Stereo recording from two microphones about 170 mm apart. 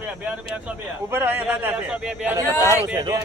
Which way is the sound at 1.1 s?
15° right (ahead or behind).